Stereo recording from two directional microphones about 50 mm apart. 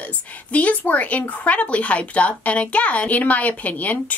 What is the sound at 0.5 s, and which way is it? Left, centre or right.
Speech, left.